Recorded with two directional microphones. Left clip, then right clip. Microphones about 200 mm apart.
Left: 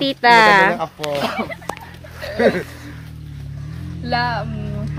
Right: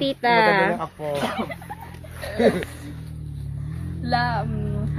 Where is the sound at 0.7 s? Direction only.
55° left (ahead or behind).